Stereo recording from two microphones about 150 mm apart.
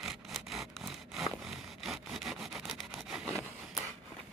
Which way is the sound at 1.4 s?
Centre (ahead or behind).